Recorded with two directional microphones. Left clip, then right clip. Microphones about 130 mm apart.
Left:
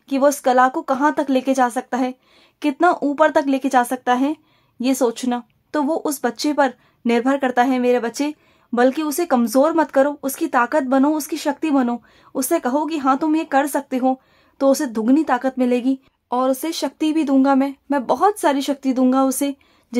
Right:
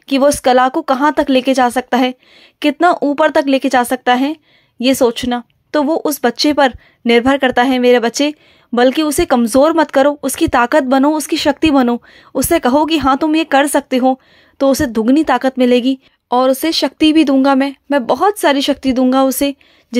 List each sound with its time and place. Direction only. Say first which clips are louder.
0.0 s speech: right 5 dB; 30° right (ahead or behind)